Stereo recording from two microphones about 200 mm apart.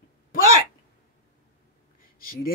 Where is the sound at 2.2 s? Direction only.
45° left (ahead or behind).